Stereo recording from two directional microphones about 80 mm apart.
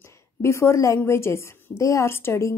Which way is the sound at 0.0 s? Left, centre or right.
Left.